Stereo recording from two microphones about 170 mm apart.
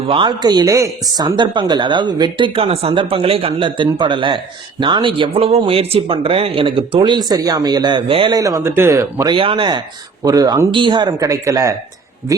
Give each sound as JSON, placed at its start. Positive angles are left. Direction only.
{"t": 0.1, "sound": "speech", "side_deg": -25}
{"t": 9.3, "sound": "speech", "side_deg": -30}